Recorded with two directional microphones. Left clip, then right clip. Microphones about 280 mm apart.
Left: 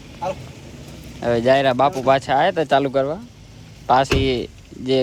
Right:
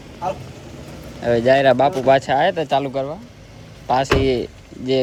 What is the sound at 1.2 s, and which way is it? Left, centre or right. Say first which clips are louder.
Speech: right 1 dB; centre.